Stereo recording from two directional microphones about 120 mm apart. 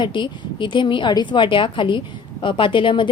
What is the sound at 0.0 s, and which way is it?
A woman's voice, 40° left (ahead or behind).